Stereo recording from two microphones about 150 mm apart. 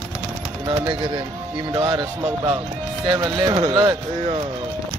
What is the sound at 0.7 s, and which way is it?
Speech, 30° right (ahead or behind).